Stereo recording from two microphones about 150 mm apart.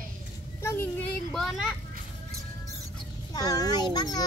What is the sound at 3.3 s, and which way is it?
Child singing, 25° left (ahead or behind).